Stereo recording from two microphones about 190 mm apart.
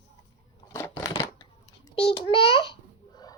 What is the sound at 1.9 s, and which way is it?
Babbling, 25° left (ahead or behind).